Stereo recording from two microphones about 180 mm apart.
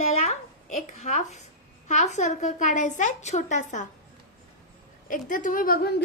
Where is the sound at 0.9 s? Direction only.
45° left (ahead or behind).